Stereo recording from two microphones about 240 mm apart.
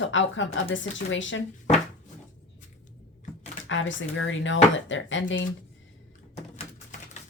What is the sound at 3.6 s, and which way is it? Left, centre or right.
Speech, left.